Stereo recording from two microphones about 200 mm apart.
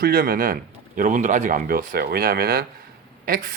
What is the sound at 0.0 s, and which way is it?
Speech, 45° right (ahead or behind).